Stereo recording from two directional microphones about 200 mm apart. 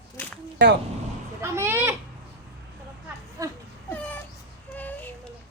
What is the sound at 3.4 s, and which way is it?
Speech, 15° right (ahead or behind).